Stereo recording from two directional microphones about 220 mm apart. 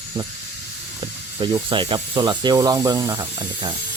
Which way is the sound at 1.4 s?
20° right (ahead or behind).